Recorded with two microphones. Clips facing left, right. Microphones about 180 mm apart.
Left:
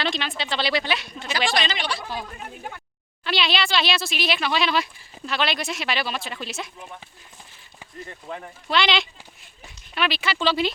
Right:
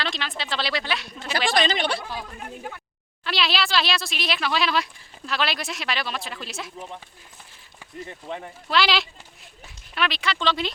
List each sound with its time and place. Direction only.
0.0 s speech: centre (ahead or behind)
1.5 s speech: 50° right (ahead or behind)
2.0 s speech: centre (ahead or behind)
8.0 s speech: 20° right (ahead or behind)
8.7 s speech: centre (ahead or behind)